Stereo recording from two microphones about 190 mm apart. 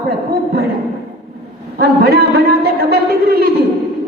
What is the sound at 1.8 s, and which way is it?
A man's voice, 55° right (ahead or behind).